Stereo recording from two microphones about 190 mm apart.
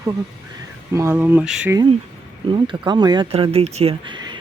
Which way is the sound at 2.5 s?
25° right (ahead or behind).